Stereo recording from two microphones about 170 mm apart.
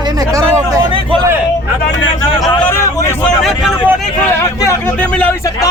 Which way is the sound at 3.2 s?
Centre (ahead or behind).